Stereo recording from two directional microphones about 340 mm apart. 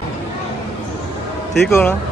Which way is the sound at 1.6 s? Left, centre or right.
Centre.